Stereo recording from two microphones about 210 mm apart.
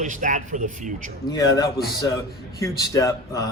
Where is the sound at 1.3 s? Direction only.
15° left (ahead or behind).